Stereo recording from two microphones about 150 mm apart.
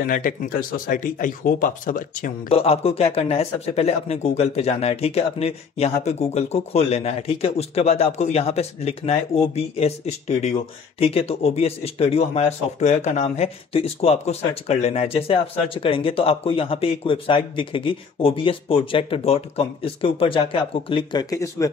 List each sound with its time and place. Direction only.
0.0 s speech: 65° left (ahead or behind)
2.5 s speech: 40° left (ahead or behind); by 21.6 s 20° left (ahead or behind)